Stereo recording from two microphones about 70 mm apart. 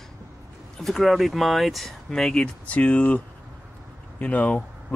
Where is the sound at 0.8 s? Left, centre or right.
Centre.